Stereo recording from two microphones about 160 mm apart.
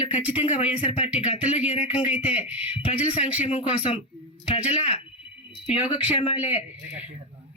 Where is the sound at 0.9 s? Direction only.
40° left (ahead or behind).